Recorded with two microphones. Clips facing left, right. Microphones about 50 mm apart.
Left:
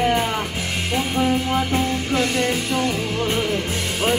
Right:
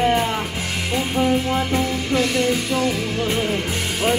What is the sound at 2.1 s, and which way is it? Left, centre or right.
Music, left.